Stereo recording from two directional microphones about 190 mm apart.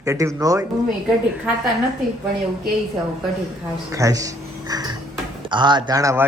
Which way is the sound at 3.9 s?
15° right (ahead or behind).